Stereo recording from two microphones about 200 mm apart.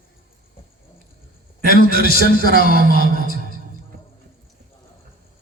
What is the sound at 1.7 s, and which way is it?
A man's voice, 50° left (ahead or behind).